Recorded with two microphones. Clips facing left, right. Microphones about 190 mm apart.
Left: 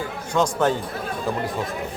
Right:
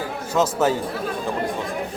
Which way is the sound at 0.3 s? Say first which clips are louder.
Right 1 dB; 5° right (ahead or behind).